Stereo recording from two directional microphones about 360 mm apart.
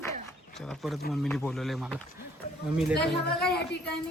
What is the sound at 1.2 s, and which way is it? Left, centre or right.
A woman's voice, centre.